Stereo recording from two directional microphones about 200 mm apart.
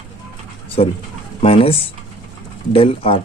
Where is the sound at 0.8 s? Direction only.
30° left (ahead or behind).